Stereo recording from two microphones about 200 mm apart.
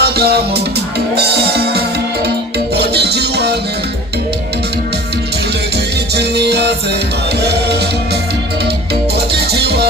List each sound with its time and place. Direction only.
0.0 s music: 55° right (ahead or behind)
2.7 s music: 55° right (ahead or behind)
5.7 s music: 55° right (ahead or behind)
9.1 s music: 55° right (ahead or behind)